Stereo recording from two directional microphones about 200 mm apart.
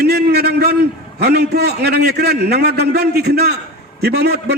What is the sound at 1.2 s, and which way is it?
A man's voice, 55° right (ahead or behind).